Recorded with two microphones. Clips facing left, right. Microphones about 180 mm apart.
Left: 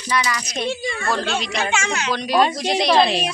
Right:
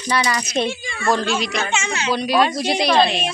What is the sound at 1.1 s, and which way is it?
Speech, 20° right (ahead or behind).